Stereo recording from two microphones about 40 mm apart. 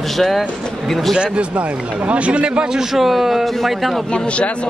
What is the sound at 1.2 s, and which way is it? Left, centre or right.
Speech, right.